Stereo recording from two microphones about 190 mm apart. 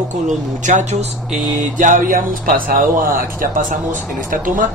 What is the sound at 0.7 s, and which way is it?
Speech, 40° right (ahead or behind).